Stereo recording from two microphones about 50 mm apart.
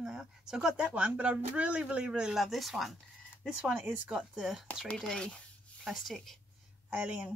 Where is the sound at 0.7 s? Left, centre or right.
Right.